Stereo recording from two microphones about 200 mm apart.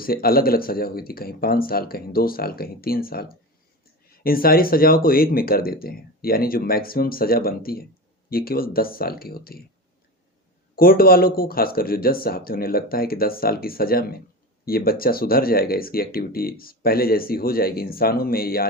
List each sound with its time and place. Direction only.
0.0 s speech: 50° left (ahead or behind)
10.8 s speech: 45° left (ahead or behind)